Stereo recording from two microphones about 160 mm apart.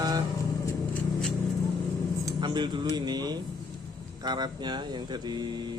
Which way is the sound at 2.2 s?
30° right (ahead or behind).